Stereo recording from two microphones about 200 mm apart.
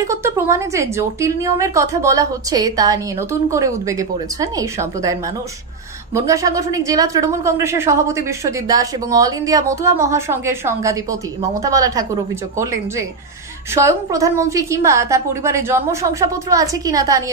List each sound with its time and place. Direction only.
0.0 s a woman's voice: 15° right (ahead or behind)
6.1 s a woman's voice: 15° right (ahead or behind)
13.7 s a woman's voice: 15° right (ahead or behind)